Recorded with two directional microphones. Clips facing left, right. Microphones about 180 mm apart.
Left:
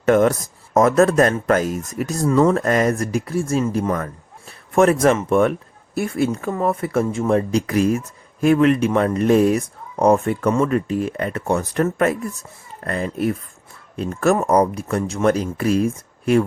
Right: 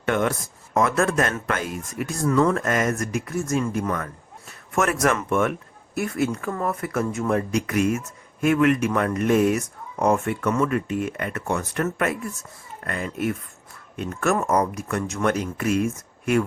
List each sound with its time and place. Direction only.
0.0 s speech: 40° left (ahead or behind)
2.2 s speech: 30° left (ahead or behind)